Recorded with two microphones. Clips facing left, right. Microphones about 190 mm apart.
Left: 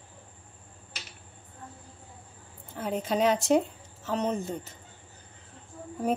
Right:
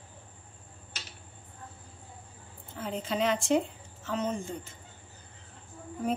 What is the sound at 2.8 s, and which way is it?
A woman's voice, 45° left (ahead or behind).